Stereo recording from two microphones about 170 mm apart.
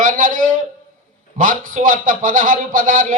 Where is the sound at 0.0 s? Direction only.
50° right (ahead or behind).